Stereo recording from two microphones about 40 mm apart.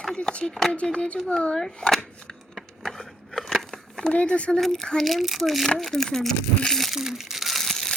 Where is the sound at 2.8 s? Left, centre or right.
Centre.